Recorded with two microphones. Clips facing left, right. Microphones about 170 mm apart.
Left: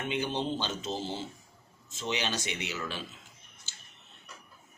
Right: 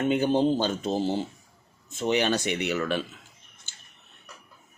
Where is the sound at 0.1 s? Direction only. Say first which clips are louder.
Right 8 dB; 45° right (ahead or behind); by 3.0 s 60° right (ahead or behind).